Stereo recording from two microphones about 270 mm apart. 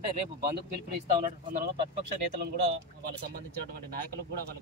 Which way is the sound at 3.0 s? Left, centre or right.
Right.